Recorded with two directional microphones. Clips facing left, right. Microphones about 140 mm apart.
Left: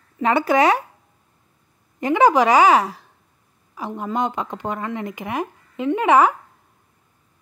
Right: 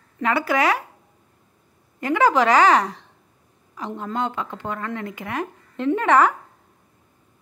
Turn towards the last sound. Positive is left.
turn(degrees=10)  # may be behind; listen again after turning